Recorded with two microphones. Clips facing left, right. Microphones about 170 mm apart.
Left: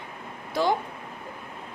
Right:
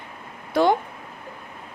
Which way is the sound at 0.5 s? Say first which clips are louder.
Right 5 dB; 60° right (ahead or behind).